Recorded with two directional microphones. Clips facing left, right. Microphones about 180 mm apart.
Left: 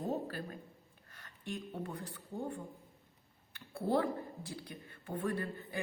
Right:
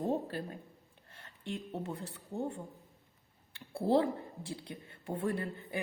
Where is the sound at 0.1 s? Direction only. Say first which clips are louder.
Right 3 dB; 25° right (ahead or behind).